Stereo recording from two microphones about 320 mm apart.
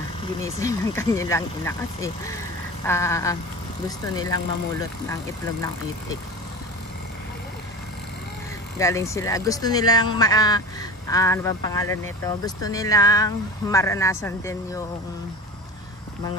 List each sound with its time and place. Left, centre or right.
0.6 s speech: centre
8.7 s speech: centre